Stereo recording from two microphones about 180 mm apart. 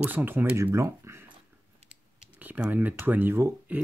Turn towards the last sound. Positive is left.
turn(degrees=-10)  # may be behind; listen again after turning